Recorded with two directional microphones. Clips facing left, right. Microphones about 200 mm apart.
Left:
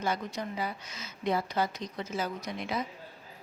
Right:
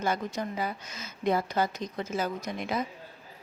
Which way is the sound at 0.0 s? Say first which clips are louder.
Right 3 dB; 50° right (ahead or behind).